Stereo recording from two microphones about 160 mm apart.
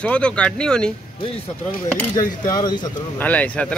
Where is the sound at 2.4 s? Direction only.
25° left (ahead or behind).